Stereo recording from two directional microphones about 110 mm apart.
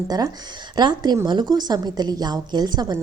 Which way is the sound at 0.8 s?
40° right (ahead or behind).